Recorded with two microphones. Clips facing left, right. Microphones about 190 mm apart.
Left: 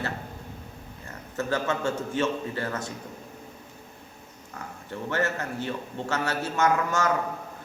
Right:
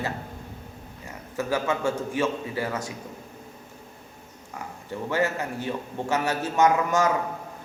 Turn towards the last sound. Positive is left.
turn(degrees=-15)  # may be behind; listen again after turning